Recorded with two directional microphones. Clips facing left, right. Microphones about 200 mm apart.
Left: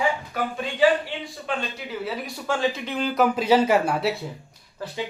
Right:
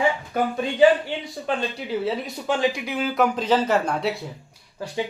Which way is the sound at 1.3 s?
40° right (ahead or behind).